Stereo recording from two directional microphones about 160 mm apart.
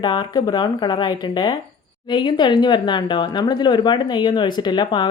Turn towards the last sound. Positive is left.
turn(degrees=30)  # may be behind; listen again after turning